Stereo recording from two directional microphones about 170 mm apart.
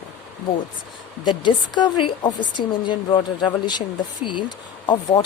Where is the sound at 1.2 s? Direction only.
25° left (ahead or behind).